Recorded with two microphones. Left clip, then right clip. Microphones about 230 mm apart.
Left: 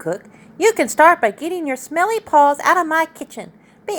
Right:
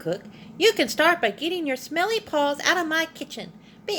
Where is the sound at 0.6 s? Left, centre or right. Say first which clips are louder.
Left 7 dB; left.